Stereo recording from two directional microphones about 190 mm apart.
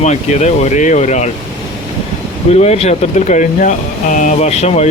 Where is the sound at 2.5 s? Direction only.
35° left (ahead or behind).